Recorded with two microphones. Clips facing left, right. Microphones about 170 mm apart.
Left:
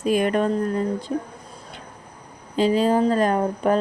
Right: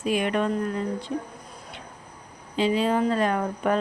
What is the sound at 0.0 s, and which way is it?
Speech, 40° left (ahead or behind).